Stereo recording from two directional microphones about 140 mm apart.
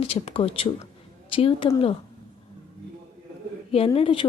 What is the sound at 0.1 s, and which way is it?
Speech, 45° left (ahead or behind).